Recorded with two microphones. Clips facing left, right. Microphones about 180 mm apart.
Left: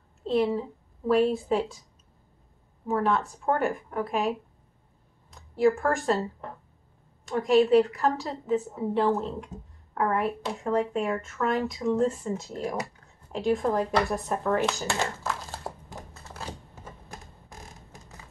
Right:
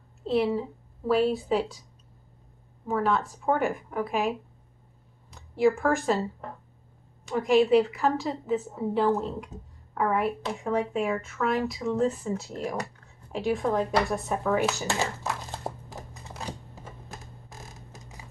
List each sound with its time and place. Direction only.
0.2 s speech: centre (ahead or behind)
2.9 s speech: centre (ahead or behind)
7.2 s speech: 5° right (ahead or behind)
15.5 s typing: 20° right (ahead or behind)